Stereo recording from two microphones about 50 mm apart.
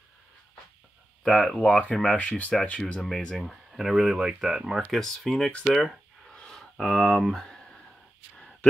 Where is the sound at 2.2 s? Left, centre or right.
Left.